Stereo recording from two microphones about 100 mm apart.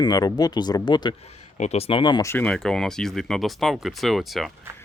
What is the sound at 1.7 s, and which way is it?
Speech, 80° left.